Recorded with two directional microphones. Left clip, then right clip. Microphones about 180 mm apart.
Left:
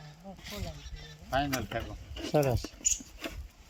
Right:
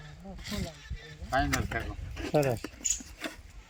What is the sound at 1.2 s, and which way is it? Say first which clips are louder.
Speech: right 2 dB; 40° left (ahead or behind).